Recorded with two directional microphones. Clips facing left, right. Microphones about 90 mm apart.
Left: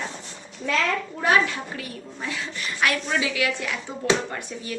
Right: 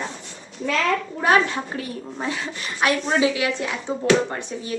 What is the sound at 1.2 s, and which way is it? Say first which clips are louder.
A woman's voice: right 2 dB; 30° right (ahead or behind).